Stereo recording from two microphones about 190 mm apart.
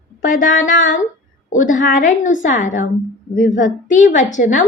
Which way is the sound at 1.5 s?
45° left (ahead or behind).